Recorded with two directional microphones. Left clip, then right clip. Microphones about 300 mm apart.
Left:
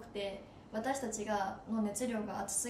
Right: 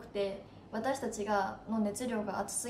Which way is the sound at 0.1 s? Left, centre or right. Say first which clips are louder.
Right 5 dB; centre.